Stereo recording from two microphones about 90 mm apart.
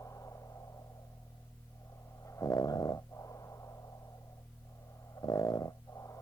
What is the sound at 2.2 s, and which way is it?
Snoring, 35° left (ahead or behind).